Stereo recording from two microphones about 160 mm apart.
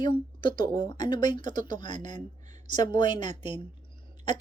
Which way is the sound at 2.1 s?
45° right (ahead or behind).